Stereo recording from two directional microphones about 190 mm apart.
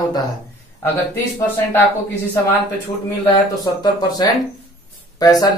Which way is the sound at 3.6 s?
20° left (ahead or behind).